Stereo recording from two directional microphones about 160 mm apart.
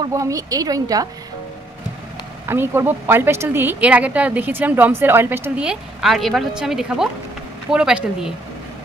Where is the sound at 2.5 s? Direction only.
15° right (ahead or behind).